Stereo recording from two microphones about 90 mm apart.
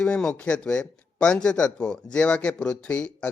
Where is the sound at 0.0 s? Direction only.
15° left (ahead or behind).